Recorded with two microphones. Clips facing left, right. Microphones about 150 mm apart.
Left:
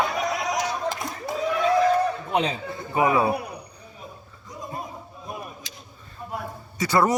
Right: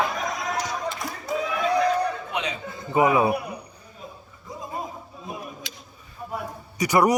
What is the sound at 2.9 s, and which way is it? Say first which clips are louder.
Speech: right 2 dB; 20° right (ahead or behind).